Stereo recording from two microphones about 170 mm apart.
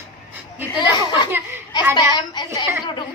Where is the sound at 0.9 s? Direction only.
25° left (ahead or behind).